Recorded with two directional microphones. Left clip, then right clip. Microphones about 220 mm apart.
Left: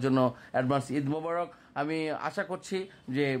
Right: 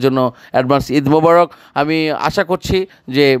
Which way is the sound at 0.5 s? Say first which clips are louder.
Right 15 dB; 40° right (ahead or behind).